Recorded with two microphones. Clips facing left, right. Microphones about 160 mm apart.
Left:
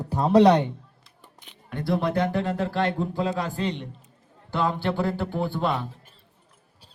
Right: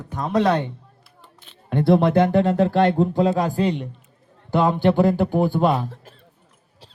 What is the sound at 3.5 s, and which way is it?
Speech, 10° right (ahead or behind).